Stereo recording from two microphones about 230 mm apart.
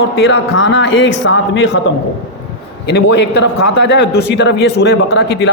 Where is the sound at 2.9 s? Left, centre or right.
Left.